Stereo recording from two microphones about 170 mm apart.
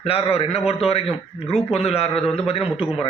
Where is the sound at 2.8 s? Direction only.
5° right (ahead or behind).